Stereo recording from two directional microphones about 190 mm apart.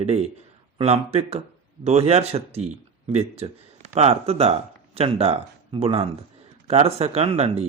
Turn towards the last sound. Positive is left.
turn(degrees=-30)  # may be behind; listen again after turning